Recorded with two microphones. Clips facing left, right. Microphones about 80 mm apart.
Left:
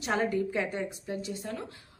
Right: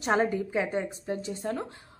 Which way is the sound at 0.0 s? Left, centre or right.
Right.